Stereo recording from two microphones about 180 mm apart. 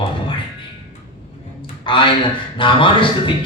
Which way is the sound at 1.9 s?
30° left (ahead or behind).